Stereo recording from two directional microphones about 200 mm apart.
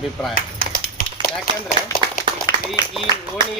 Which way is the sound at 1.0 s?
45° left (ahead or behind).